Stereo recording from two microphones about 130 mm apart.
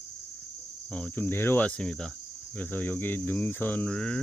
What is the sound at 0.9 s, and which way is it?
Cricket, 10° left (ahead or behind).